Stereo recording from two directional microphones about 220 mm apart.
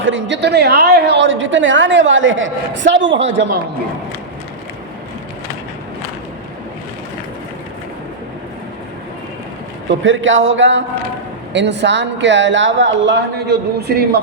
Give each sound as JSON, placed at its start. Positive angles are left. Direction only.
{"t": 0.0, "sound": "a woman's voice", "side_deg": -60}
{"t": 9.9, "sound": "a woman's voice", "side_deg": -60}